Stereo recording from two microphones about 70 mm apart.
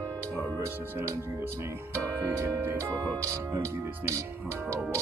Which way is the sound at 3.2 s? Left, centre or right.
Right.